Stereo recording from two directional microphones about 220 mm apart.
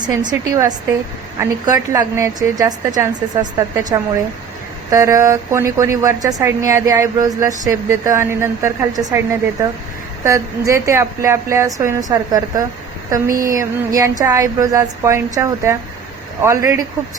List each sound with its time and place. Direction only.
0.1 s a woman's voice: 20° right (ahead or behind)